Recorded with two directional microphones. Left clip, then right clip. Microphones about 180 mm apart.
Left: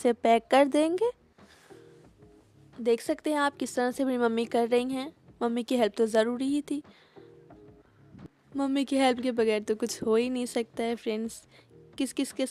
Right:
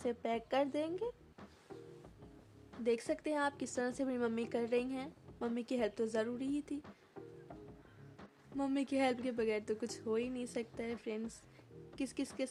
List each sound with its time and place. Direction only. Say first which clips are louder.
0.0 s a woman's voice: left 15 dB; 55° left (ahead or behind)
2.8 s a woman's voice: left 9 dB; 40° left (ahead or behind)
8.5 s a woman's voice: left 9 dB; 40° left (ahead or behind)